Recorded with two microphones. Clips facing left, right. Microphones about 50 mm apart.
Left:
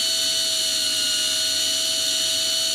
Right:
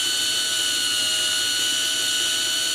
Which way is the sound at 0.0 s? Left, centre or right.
Right.